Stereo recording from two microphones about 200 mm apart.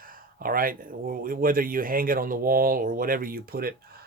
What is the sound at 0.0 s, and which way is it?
Speech, 45° right (ahead or behind).